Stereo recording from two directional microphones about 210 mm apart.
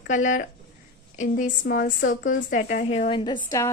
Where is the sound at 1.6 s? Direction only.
50° left (ahead or behind).